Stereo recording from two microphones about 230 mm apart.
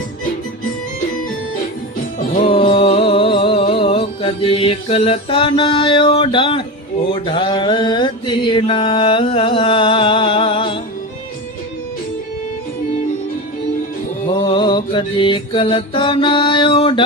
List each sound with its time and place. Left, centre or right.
2.4 s music: left
7.1 s mantra: left
14.4 s mantra: left